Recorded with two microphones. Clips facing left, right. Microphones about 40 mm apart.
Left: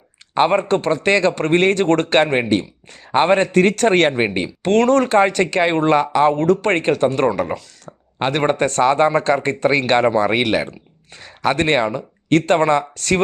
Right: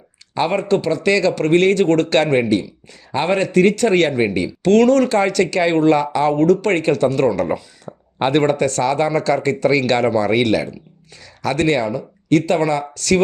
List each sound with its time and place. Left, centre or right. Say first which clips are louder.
0.3 s speech: left 2 dB; left
2.5 s speech: even; left
7.9 s a sound: right 2 dB; centre
8.4 s speech: left 1 dB; left